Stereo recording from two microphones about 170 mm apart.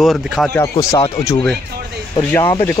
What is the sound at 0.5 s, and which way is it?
Speech, 15° left (ahead or behind).